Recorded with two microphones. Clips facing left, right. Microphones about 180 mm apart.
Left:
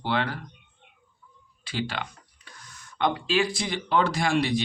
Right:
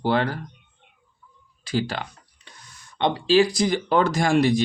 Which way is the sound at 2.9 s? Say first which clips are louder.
Right 6 dB; 30° right (ahead or behind).